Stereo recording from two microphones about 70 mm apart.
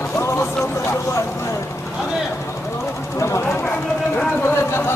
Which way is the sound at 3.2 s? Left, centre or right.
Left.